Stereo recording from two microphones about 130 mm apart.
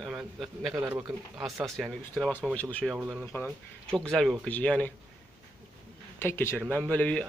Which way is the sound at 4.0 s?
5° left (ahead or behind).